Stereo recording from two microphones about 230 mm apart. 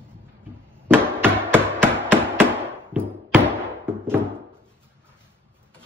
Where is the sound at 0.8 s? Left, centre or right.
Centre.